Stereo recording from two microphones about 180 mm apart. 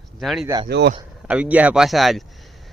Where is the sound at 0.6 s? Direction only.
65° right (ahead or behind).